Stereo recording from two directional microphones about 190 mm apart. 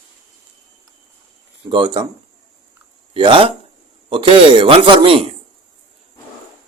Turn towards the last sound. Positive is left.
turn(degrees=-25)  # may be behind; listen again after turning